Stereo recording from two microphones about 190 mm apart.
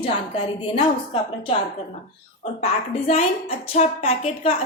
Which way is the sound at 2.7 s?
35° left (ahead or behind).